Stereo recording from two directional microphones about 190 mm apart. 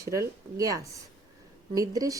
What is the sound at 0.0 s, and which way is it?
A woman's voice, 15° right (ahead or behind).